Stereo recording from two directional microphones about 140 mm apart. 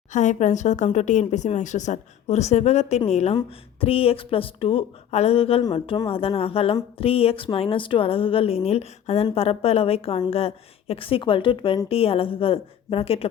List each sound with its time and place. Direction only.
0.1 s a woman's voice: 60° left (ahead or behind); by 13.2 s 45° left (ahead or behind)